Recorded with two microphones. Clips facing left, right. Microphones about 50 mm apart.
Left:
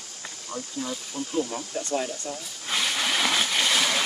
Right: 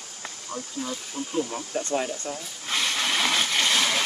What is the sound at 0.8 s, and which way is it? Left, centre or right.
Speech, centre.